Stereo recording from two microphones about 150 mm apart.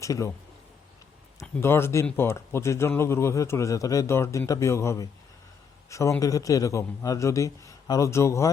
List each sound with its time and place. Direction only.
0.0 s a man's voice: 20° left (ahead or behind)
1.6 s speech: 15° left (ahead or behind)